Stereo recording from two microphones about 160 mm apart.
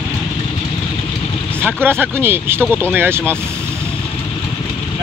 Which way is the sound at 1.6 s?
15° right (ahead or behind).